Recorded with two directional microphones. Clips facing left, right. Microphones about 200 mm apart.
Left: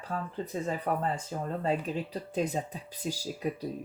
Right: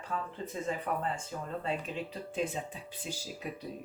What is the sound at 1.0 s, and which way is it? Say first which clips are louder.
Speech: left 4 dB; 40° left (ahead or behind).